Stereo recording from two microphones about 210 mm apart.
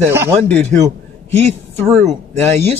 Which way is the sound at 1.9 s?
Centre (ahead or behind).